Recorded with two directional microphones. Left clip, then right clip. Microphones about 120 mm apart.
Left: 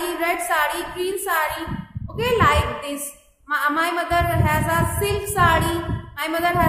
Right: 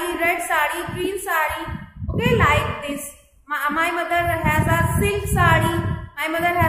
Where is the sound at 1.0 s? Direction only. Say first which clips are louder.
Even; 10° left (ahead or behind).